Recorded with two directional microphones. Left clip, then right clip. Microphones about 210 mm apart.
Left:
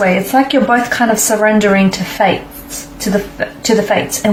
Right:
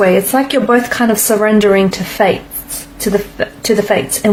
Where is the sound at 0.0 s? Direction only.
45° right (ahead or behind).